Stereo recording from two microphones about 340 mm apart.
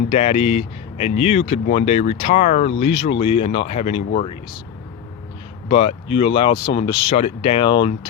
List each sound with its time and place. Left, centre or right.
0.1 s speech: centre
5.6 s speech: centre